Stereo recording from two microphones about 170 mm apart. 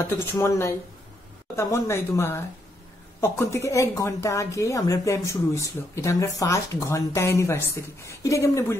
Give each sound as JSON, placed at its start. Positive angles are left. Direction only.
{"t": 0.2, "sound": "speech", "side_deg": 15}